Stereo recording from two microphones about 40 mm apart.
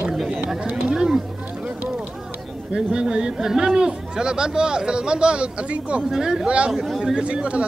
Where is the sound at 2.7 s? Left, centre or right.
Right.